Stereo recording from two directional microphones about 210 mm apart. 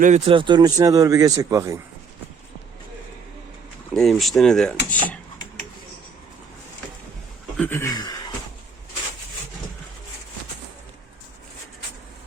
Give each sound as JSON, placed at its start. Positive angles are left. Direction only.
{"t": 0.0, "sound": "speech", "side_deg": -30}
{"t": 3.9, "sound": "speech", "side_deg": 0}
{"t": 4.9, "sound": "dishes", "side_deg": 5}
{"t": 7.5, "sound": "speech", "side_deg": 10}